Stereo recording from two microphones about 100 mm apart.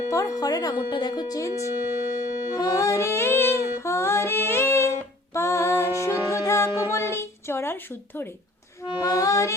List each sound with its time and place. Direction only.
0.1 s speech: 35° left (ahead or behind)
2.5 s child singing: 35° left (ahead or behind)
5.3 s music: 30° left (ahead or behind)
9.0 s speech: 35° left (ahead or behind)